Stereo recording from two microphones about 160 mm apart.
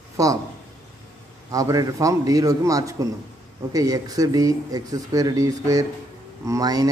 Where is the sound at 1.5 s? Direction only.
20° right (ahead or behind).